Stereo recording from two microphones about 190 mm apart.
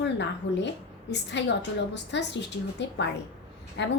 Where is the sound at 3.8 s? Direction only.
65° left (ahead or behind).